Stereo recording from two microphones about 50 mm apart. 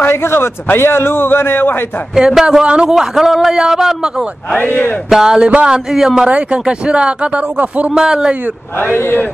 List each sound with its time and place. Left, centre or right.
0.1 s a man's voice: left
2.1 s a man's voice: centre
2.6 s speech: right
3.0 s a man's voice: centre
4.6 s speech: left
5.1 s a man's voice: centre
5.9 s a man's voice: centre
6.2 s speech: right
7.9 s a man's voice: centre
8.7 s a man's voice: left